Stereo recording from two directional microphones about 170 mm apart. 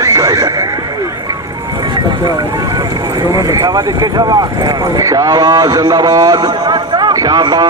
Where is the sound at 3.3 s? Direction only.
20° right (ahead or behind).